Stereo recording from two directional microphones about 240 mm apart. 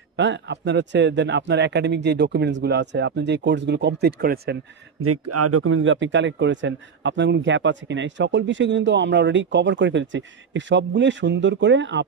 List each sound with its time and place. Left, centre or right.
0.1 s speech: right
5.0 s speech: right